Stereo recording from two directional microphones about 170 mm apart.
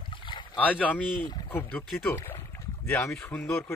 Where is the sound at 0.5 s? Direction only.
10° left (ahead or behind).